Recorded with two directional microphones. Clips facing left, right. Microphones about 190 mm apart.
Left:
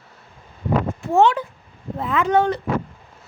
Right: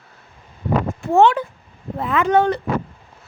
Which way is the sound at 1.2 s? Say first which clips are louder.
Right 2 dB; 60° right (ahead or behind).